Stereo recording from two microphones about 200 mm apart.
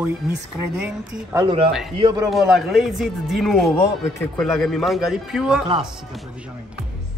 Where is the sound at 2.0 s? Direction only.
25° right (ahead or behind).